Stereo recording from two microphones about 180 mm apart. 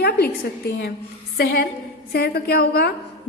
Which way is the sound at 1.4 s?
60° left (ahead or behind).